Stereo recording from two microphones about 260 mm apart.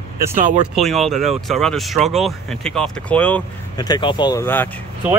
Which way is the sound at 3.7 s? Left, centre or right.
Centre.